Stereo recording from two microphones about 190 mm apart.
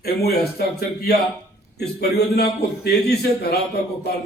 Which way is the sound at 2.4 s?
60° left (ahead or behind).